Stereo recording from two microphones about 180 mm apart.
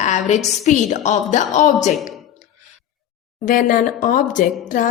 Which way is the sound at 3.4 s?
50° left (ahead or behind).